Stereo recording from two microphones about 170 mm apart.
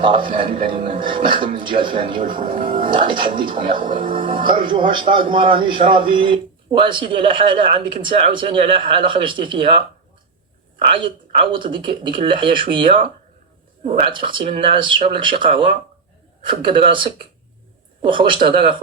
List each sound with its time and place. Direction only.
0.0 s a man's voice: 30° right (ahead or behind)
10.9 s a man's voice: 30° right (ahead or behind)